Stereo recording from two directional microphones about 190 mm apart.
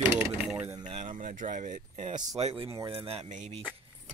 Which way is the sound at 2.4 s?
30° right (ahead or behind).